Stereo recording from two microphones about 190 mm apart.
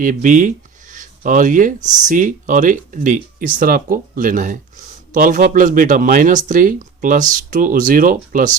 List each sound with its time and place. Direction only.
0.0 s speech: 45° right (ahead or behind)